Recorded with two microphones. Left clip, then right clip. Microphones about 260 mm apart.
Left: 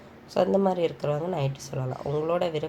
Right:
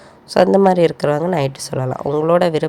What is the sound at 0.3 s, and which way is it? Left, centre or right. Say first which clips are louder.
Speech: right 11 dB; right.